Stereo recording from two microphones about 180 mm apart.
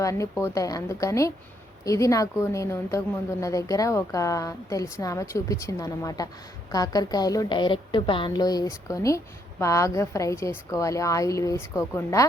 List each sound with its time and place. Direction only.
0.0 s a woman's voice: 15° left (ahead or behind)